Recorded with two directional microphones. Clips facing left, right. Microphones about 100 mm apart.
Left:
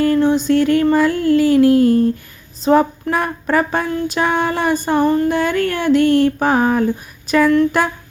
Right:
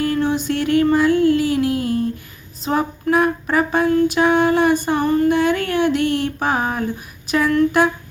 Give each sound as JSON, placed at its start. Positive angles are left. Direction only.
{"t": 0.2, "sound": "music", "side_deg": 30}
{"t": 3.7, "sound": "female singing", "side_deg": 35}